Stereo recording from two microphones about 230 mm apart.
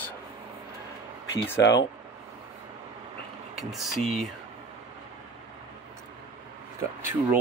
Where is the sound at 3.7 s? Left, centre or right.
Centre.